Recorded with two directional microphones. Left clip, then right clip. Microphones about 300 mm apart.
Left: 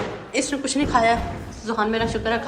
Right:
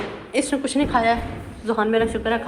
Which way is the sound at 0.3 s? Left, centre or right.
Centre.